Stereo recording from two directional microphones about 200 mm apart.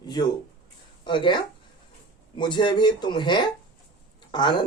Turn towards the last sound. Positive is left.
turn(degrees=25)  # may be behind; listen again after turning